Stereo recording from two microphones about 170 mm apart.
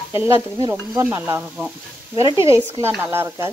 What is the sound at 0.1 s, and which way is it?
Stir, 15° right (ahead or behind).